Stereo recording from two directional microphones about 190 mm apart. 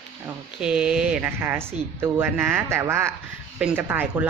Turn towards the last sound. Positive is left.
turn(degrees=-10)  # may be behind; listen again after turning